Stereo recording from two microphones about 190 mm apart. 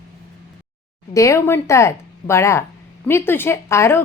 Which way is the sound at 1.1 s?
15° left (ahead or behind).